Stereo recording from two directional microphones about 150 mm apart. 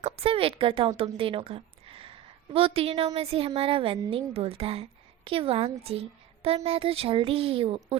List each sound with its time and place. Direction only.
0.0 s a woman's voice: 40° right (ahead or behind)